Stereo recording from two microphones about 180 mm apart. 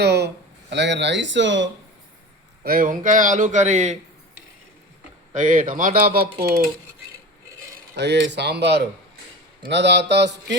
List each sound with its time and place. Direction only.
0.0 s speech: 65° right (ahead or behind); by 1.7 s 90° right
2.6 s speech: 50° right (ahead or behind)
5.3 s speech: 45° right (ahead or behind)
7.9 s speech: 70° right (ahead or behind)